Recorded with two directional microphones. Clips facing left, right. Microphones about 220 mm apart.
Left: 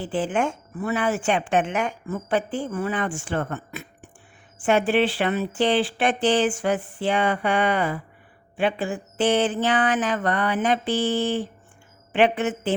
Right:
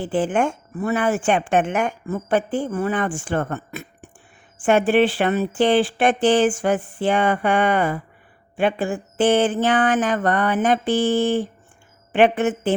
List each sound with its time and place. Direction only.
0.0 s a woman's voice: 50° right (ahead or behind)